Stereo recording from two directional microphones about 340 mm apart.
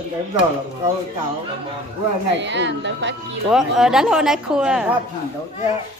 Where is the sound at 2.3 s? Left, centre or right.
Right.